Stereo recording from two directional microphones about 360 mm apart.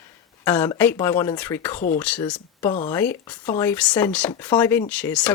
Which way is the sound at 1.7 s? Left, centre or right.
Left.